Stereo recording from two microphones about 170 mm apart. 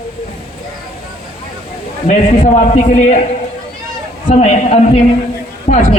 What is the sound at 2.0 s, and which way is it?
A man's voice, 45° left (ahead or behind).